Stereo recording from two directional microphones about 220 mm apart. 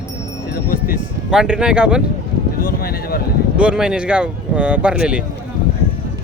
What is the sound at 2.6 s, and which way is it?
Speech, 40° left (ahead or behind).